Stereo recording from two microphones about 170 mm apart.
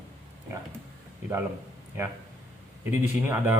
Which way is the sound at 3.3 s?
10° right (ahead or behind).